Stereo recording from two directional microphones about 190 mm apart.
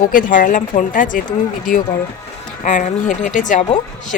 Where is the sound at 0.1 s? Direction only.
45° left (ahead or behind).